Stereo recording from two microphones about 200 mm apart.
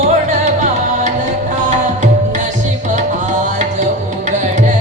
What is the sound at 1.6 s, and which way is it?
Tabla, 40° right (ahead or behind).